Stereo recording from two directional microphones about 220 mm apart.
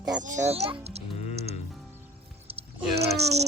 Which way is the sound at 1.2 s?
30° left (ahead or behind).